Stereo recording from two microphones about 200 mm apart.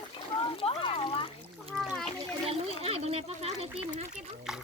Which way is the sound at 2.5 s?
30° right (ahead or behind).